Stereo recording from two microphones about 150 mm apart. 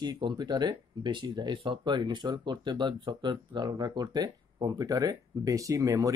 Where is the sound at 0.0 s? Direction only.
30° right (ahead or behind).